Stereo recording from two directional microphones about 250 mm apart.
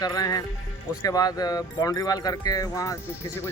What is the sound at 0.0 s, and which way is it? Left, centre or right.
Speech, centre.